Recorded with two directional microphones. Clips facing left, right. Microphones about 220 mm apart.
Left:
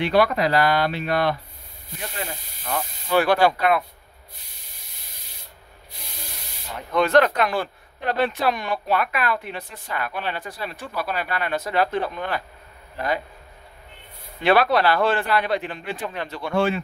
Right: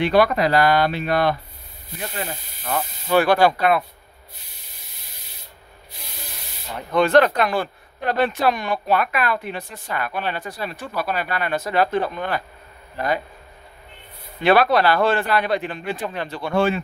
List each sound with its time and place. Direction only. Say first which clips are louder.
0.0 s speech: right 2 dB; 45° right (ahead or behind)
3.1 s speech: right 2 dB; 45° right (ahead or behind)
6.9 s speech: right 2 dB; 30° right (ahead or behind)
14.4 s speech: right 2 dB; 45° right (ahead or behind)